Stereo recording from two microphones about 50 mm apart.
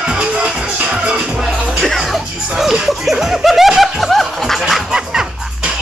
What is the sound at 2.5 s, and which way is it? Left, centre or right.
Music, centre.